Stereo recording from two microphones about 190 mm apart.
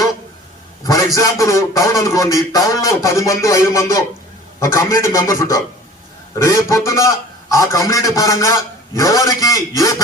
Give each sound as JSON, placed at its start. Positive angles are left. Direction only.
{"t": 0.9, "sound": "a man's voice", "side_deg": 15}